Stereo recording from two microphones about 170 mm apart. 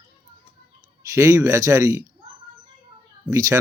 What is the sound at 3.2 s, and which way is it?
Speech, 20° right (ahead or behind).